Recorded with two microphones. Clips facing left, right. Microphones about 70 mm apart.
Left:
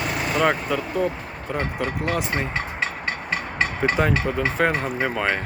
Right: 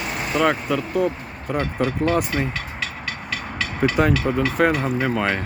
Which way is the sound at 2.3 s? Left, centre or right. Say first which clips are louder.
Right 1 dB; left.